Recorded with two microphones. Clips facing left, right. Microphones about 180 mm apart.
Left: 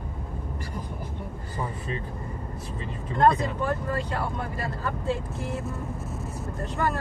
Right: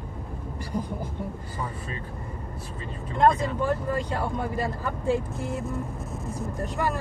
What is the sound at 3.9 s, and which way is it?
Speech, 15° right (ahead or behind).